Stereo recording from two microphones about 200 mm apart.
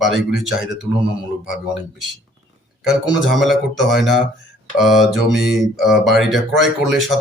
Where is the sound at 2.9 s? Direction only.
Centre (ahead or behind).